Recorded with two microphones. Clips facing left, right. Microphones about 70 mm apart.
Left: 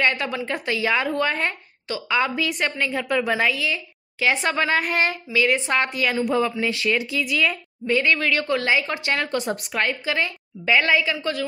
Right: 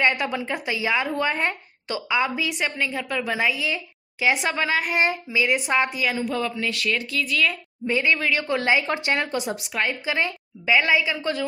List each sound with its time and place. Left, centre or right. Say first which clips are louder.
0.0 s a woman's voice: even; centre
3.5 s a woman's voice: left 1 dB; right; by 4.9 s centre
4.9 s a woman's voice: even; centre
6.4 s speech: left 3 dB; left
7.8 s speech: left 2 dB; centre
9.4 s a woman's voice: left 2 dB; centre
9.8 s speech: right 1 dB; right
10.6 s a woman's voice: left 1 dB; centre
11.1 s speech: even; right